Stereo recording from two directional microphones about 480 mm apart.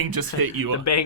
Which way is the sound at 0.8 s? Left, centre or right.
Left.